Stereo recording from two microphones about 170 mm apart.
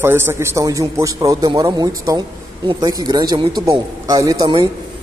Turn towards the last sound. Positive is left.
turn(degrees=-25)  # may be behind; listen again after turning